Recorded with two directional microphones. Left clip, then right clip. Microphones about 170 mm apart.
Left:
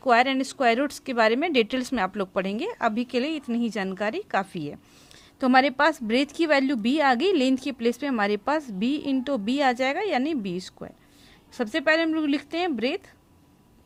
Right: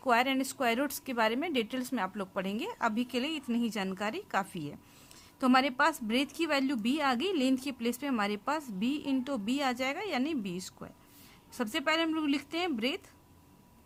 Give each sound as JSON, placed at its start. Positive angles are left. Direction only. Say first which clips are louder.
{"t": 0.0, "sound": "a woman's voice", "louder": "left 7 dB", "side_deg": 20}